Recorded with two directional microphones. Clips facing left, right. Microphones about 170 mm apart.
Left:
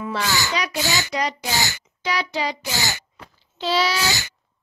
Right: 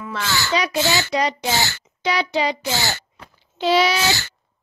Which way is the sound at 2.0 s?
20° right (ahead or behind).